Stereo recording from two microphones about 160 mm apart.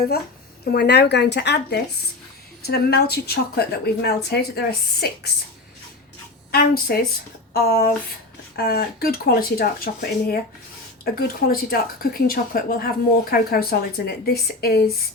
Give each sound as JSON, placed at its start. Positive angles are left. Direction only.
{"t": 0.6, "sound": "a woman's voice", "side_deg": 85}
{"t": 6.5, "sound": "speech", "side_deg": 70}